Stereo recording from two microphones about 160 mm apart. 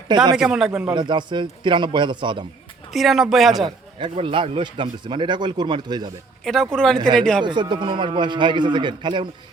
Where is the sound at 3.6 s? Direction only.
30° right (ahead or behind).